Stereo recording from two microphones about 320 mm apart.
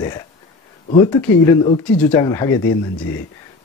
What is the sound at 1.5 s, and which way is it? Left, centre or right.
Speech, centre.